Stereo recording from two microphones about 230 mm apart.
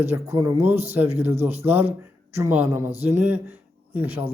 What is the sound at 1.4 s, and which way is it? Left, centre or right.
Speech, right.